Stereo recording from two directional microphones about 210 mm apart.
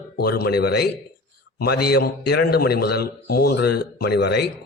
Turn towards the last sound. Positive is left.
turn(degrees=50)  # may be behind; listen again after turning